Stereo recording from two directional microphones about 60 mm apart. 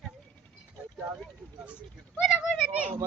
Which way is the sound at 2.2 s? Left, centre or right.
Centre.